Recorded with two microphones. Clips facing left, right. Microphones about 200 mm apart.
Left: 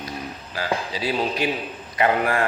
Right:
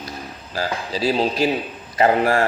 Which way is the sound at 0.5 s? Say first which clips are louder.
Right 2 dB; 40° right (ahead or behind).